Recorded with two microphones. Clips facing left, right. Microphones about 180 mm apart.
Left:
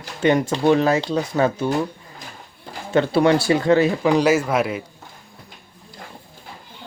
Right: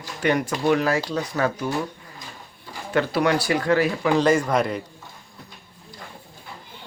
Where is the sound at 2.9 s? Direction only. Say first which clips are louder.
Left 5 dB; 25° left (ahead or behind).